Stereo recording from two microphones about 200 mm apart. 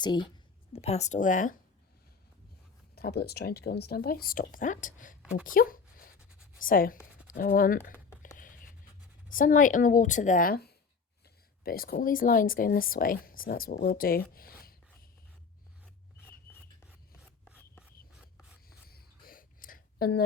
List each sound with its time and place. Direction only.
0.0 s speech: 20° left (ahead or behind)
0.7 s a woman's voice: 30° left (ahead or behind)
2.9 s speech: 50° left (ahead or behind)
5.2 s speech: 5° right (ahead or behind)
5.5 s a sound: 45° left (ahead or behind)
6.6 s speech: 45° left (ahead or behind)
8.4 s a sound: 40° left (ahead or behind)
9.3 s a woman's voice: 40° left (ahead or behind)
18.9 s a sound: 50° left (ahead or behind)